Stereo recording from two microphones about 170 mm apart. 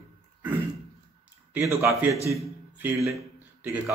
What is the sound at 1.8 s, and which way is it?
A man's voice, 15° right (ahead or behind).